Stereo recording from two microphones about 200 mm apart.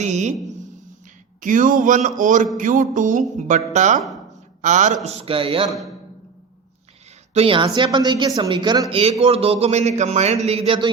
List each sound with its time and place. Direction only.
0.0 s speech: 35° right (ahead or behind)
1.4 s a woman's voice: 40° right (ahead or behind)
7.3 s a woman's voice: 25° right (ahead or behind)